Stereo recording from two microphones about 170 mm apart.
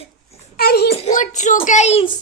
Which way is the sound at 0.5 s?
65° left (ahead or behind).